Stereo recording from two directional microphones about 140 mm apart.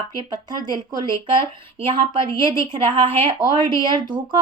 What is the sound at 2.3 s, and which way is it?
Speech, 25° left (ahead or behind).